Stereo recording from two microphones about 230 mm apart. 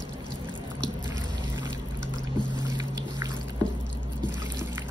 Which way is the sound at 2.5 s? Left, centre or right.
Centre.